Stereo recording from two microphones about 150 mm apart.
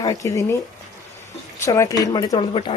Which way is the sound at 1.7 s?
20° left (ahead or behind).